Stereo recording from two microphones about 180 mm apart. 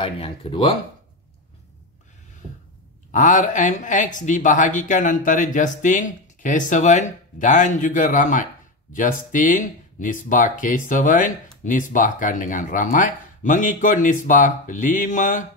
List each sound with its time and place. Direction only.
0.0 s speech: 30° left (ahead or behind)
3.1 s speech: 45° left (ahead or behind)